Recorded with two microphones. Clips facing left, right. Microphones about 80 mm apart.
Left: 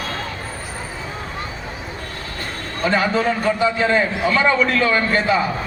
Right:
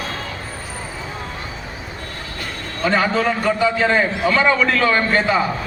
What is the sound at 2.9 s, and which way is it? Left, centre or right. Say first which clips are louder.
A man's voice: even; right.